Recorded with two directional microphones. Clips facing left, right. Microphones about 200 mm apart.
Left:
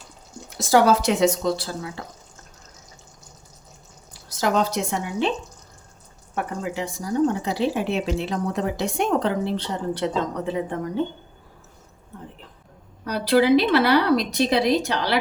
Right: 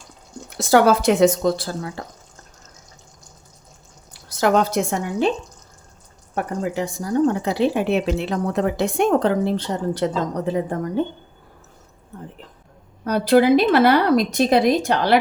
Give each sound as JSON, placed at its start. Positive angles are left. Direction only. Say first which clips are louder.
{"t": 0.5, "sound": "speech", "louder": "right 2 dB", "side_deg": -60}
{"t": 4.4, "sound": "speech", "louder": "right 4 dB", "side_deg": -60}
{"t": 6.3, "sound": "speech", "louder": "right 4 dB", "side_deg": -45}
{"t": 13.1, "sound": "speech", "louder": "right 3 dB", "side_deg": -50}